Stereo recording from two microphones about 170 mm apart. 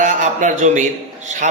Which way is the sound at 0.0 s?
45° right (ahead or behind).